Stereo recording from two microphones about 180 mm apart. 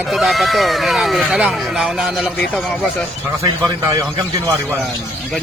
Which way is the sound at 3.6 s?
20° right (ahead or behind).